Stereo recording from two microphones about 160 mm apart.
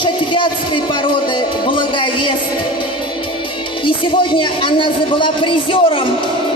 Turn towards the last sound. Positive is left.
turn(degrees=30)  # may be behind; listen again after turning